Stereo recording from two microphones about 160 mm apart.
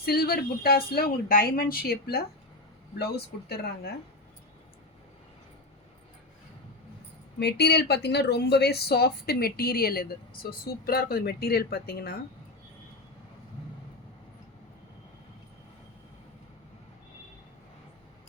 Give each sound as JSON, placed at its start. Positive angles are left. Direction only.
{"t": 0.0, "sound": "speech", "side_deg": 75}
{"t": 3.0, "sound": "speech", "side_deg": 90}
{"t": 7.3, "sound": "speech", "side_deg": 90}